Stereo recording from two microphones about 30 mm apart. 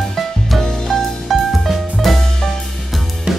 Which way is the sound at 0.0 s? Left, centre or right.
Centre.